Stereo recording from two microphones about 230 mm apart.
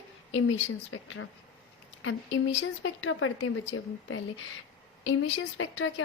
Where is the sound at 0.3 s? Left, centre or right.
Left.